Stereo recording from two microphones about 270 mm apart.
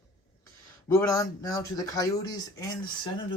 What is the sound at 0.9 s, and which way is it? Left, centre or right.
Speech, centre.